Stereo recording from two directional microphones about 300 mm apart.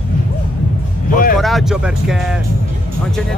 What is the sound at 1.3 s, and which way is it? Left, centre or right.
Speech, centre.